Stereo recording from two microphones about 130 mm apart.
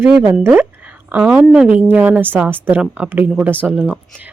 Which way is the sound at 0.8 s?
10° right (ahead or behind).